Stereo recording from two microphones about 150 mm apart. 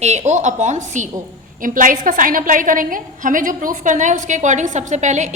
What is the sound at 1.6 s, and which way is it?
A woman's voice, 65° right (ahead or behind).